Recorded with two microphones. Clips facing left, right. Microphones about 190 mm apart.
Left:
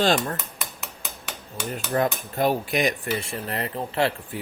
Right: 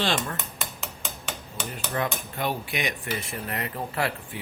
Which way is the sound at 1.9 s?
40° left (ahead or behind).